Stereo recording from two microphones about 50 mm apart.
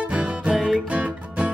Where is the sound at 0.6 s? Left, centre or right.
Right.